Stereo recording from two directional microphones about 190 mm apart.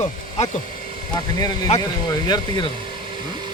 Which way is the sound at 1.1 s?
20° left (ahead or behind).